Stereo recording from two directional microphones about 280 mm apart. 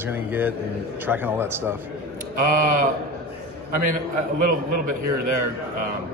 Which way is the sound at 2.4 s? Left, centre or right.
Right.